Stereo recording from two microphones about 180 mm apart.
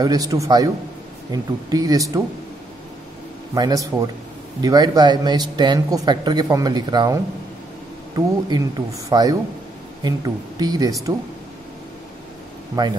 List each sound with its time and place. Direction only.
0.0 s speech: 20° right (ahead or behind)
3.5 s speech: 20° right (ahead or behind)